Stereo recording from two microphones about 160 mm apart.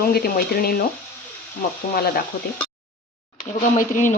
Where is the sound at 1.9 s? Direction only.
70° left (ahead or behind).